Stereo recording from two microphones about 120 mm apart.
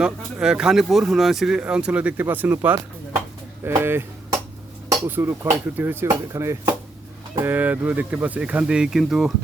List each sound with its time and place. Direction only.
0.0 s speech: 5° right (ahead or behind)
3.6 s chop: 25° right (ahead or behind)
5.0 s speech: 20° right (ahead or behind)